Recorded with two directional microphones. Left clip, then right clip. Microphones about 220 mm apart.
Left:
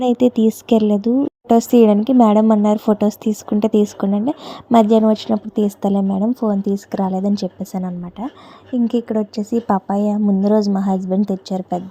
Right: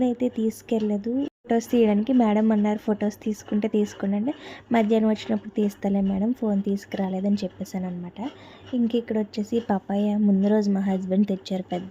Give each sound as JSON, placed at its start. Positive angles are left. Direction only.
{"t": 0.0, "sound": "a woman's voice", "side_deg": 25}
{"t": 9.6, "sound": "a woman's voice", "side_deg": 0}
{"t": 9.9, "sound": "a woman's voice", "side_deg": 15}